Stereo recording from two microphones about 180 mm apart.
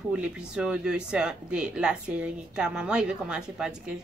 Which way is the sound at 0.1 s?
5° right (ahead or behind).